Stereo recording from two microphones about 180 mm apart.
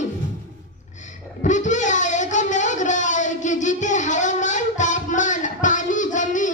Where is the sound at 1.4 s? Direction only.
45° left (ahead or behind).